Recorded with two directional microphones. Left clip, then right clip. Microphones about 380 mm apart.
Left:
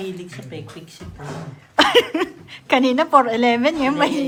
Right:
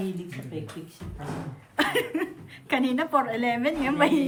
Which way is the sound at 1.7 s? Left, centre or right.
Centre.